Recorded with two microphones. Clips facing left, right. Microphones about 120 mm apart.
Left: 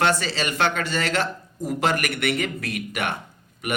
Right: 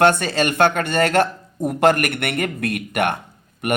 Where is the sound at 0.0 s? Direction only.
55° right (ahead or behind).